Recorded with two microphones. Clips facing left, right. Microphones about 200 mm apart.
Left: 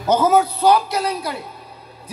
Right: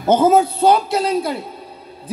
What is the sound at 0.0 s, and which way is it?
A man's voice, 25° right (ahead or behind).